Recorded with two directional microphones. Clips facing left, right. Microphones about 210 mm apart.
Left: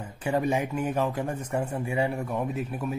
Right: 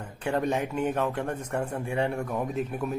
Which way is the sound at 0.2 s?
5° left (ahead or behind).